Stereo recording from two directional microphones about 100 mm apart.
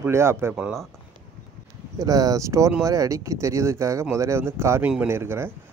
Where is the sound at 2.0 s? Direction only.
35° right (ahead or behind).